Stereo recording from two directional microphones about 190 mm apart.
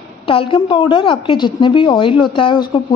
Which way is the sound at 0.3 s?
25° left (ahead or behind).